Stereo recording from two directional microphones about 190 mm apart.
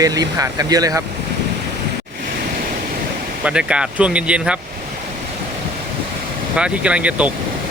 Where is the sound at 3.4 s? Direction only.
5° right (ahead or behind).